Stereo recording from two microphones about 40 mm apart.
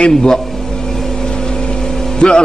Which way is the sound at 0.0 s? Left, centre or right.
Centre.